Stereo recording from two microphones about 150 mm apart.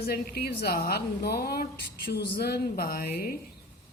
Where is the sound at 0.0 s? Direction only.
90° left.